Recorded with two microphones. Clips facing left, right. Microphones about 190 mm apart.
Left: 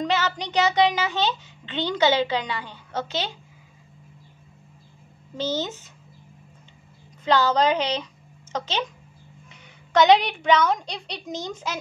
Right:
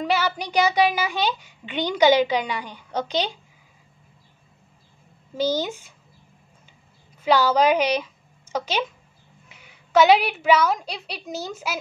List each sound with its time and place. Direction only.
0.0 s a child's voice: 10° right (ahead or behind)
5.4 s a child's voice: 10° right (ahead or behind)
7.2 s a woman's voice: 10° right (ahead or behind)